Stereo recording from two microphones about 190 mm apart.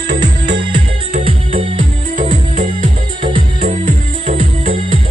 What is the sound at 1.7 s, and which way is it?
Music, 40° right (ahead or behind).